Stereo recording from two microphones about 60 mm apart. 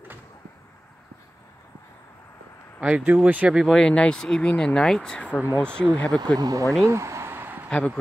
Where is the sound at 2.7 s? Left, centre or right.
Right.